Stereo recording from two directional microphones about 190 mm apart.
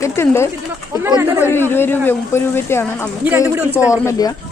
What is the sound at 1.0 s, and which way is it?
Speech, 15° right (ahead or behind).